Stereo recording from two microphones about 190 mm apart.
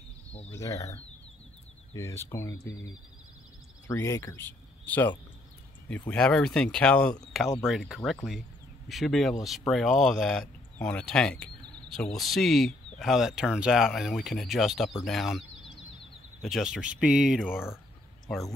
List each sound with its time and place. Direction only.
0.5 s speech: 15° left (ahead or behind)
3.8 s speech: 15° left (ahead or behind)
16.4 s speech: centre (ahead or behind)